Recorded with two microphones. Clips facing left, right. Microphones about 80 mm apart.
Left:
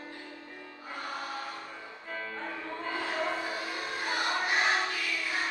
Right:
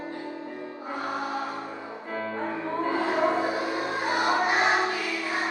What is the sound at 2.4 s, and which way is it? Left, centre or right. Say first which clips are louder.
Music: right 9 dB; right.